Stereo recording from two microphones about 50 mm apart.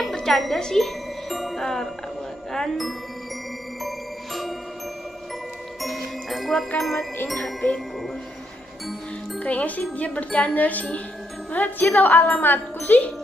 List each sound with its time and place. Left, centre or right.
0.1 s music: centre
2.5 s speech: centre
3.8 s music: centre
5.8 s music: centre
9.4 s wind chime: left